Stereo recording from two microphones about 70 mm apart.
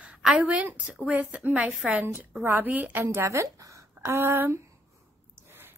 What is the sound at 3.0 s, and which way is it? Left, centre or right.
Speech, right.